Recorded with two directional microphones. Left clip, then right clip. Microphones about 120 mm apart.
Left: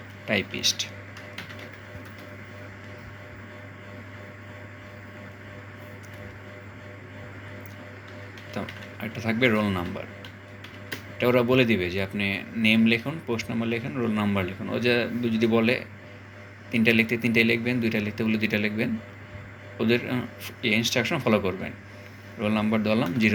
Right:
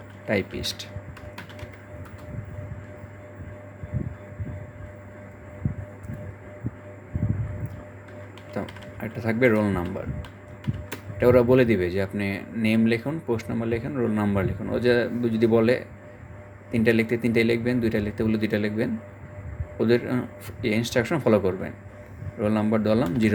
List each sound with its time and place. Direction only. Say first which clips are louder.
0.3 s a man's voice: left 1 dB; 75° right (ahead or behind)
8.5 s a sound: right 2 dB; 80° right
9.6 s speech: right 2 dB; 60° right (ahead or behind)
11.2 s a man's voice: right 3 dB; 75° right (ahead or behind)